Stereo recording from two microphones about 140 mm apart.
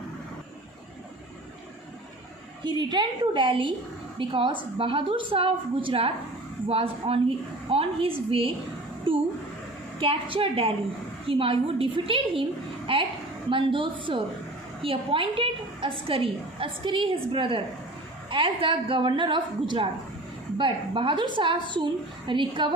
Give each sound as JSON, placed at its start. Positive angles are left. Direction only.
{"t": 2.6, "sound": "a woman's voice", "side_deg": -30}